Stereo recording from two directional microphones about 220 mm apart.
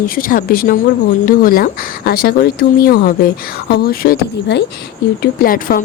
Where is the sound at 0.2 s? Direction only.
40° left (ahead or behind).